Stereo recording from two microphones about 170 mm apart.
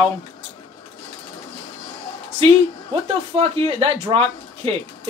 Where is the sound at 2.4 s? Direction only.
35° right (ahead or behind).